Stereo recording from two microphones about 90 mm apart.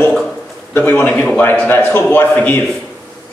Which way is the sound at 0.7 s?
20° left (ahead or behind).